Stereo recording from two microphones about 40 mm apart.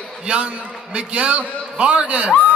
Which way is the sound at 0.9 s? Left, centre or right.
Right.